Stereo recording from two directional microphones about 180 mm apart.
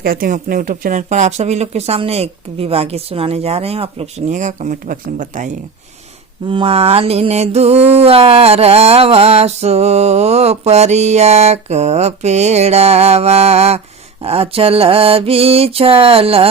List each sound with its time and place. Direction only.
0.0 s mantra: 55° right (ahead or behind)
6.5 s mantra: 30° right (ahead or behind)